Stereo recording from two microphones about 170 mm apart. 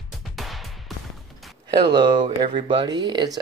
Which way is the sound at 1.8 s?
25° right (ahead or behind).